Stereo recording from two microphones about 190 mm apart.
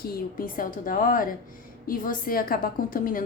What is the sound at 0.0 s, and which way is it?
A woman's voice, 50° left (ahead or behind).